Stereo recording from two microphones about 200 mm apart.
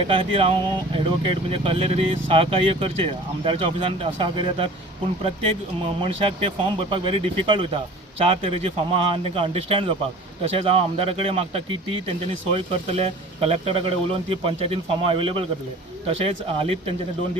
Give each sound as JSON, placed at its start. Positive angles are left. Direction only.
{"t": 0.1, "sound": "speech", "side_deg": -25}